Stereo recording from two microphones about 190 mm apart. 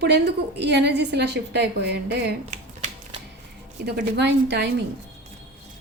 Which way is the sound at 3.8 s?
60° right (ahead or behind).